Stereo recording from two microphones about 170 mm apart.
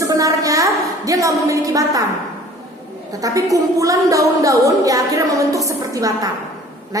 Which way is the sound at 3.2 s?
20° right (ahead or behind).